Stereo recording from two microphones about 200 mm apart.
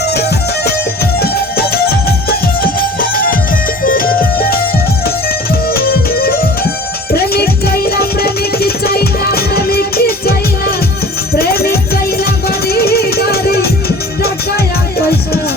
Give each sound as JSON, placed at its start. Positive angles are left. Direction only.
{"t": 0.1, "sound": "music", "side_deg": 55}
{"t": 5.7, "sound": "music", "side_deg": 50}
{"t": 11.3, "sound": "music", "side_deg": 50}
{"t": 14.9, "sound": "music", "side_deg": 50}